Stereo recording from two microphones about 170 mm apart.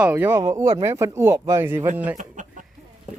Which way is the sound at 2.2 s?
50° right (ahead or behind).